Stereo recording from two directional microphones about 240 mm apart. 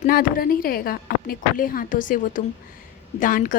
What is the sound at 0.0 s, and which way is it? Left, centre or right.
A woman's voice, left.